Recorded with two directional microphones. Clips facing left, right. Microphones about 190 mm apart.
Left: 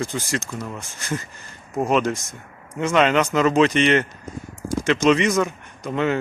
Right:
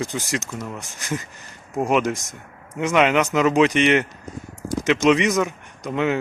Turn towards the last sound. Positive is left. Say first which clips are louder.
# even
turn(degrees=-15)  # may be behind; listen again after turning